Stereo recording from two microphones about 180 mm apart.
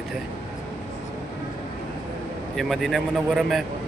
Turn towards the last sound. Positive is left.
turn(degrees=0)  # may be behind; listen again after turning